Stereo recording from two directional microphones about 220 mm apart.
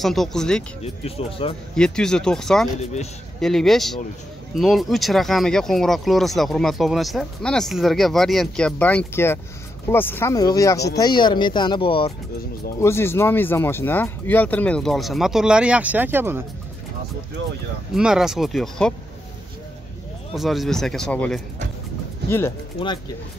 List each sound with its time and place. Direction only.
0.0 s speech: centre (ahead or behind)
0.8 s speech: 25° left (ahead or behind)
1.8 s speech: 5° left (ahead or behind)
2.8 s speech: 30° left (ahead or behind)
3.3 s speech: centre (ahead or behind); by 12.1 s 25° left (ahead or behind)
12.8 s speech: 10° left (ahead or behind); by 16.4 s 10° right (ahead or behind)
17.9 s speech: centre (ahead or behind)
20.3 s speech: centre (ahead or behind)